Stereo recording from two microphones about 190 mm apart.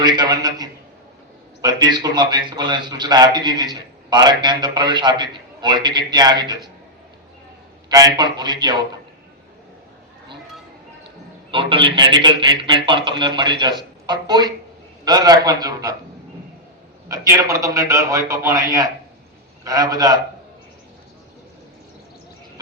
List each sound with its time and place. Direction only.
0.0 s a man's voice: 20° right (ahead or behind)
7.9 s a man's voice: 20° right (ahead or behind)
11.5 s a man's voice: 25° right (ahead or behind)
17.1 s a man's voice: 20° right (ahead or behind)